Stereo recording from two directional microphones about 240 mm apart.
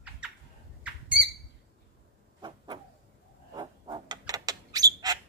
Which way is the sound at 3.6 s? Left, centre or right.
Centre.